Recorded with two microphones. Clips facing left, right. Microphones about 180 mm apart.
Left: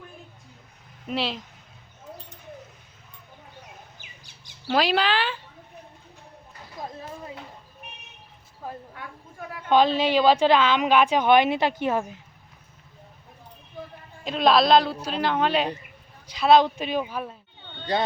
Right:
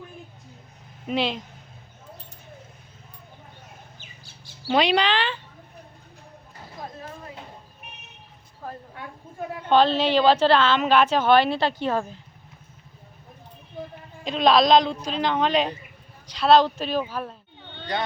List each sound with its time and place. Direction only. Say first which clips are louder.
1.0 s speech: right 3 dB; centre (ahead or behind)
4.0 s bird: right 3 dB; 15° left (ahead or behind)
4.7 s speech: right 2 dB; centre (ahead or behind)
9.6 s a woman's voice: right 1 dB; 10° left (ahead or behind)
14.3 s a woman's voice: right 1 dB; 5° left (ahead or behind)